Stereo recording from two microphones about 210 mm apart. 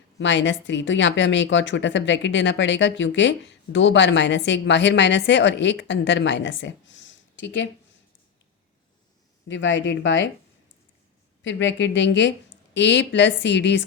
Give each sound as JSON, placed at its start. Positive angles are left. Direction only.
{"t": 0.2, "sound": "speech", "side_deg": 60}
{"t": 9.5, "sound": "speech", "side_deg": 60}
{"t": 11.4, "sound": "speech", "side_deg": 60}